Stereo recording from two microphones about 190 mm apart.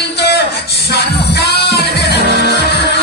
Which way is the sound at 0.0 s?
60° left (ahead or behind).